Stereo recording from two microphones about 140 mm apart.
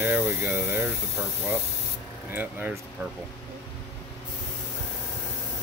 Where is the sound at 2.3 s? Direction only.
15° right (ahead or behind).